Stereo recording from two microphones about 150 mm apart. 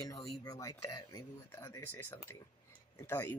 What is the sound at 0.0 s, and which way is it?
Speech, 25° left (ahead or behind).